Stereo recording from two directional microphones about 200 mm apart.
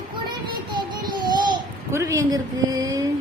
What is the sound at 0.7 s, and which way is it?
Babbling, 20° right (ahead or behind).